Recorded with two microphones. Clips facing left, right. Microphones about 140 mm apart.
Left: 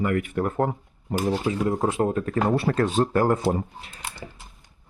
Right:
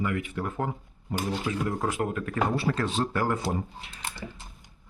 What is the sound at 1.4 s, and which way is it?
Speech, 25° left (ahead or behind).